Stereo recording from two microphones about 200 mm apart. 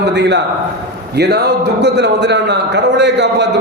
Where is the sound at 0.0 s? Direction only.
60° right (ahead or behind).